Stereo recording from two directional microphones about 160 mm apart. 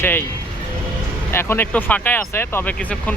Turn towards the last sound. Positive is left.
turn(degrees=10)  # may be behind; listen again after turning